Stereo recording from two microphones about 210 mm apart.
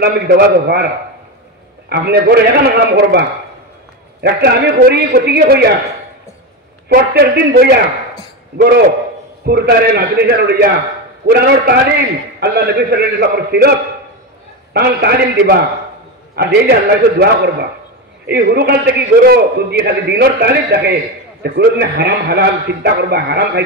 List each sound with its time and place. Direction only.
0.0 s a man's voice: 50° right (ahead or behind)
1.9 s a man's voice: 50° right (ahead or behind)
4.2 s a man's voice: 50° right (ahead or behind)
6.9 s a man's voice: 45° right (ahead or behind)